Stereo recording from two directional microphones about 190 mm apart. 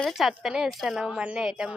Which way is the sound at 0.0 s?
Centre (ahead or behind).